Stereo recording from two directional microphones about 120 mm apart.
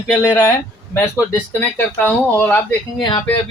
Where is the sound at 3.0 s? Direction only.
40° left (ahead or behind).